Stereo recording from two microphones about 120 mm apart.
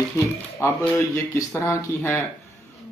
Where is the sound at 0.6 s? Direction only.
20° left (ahead or behind).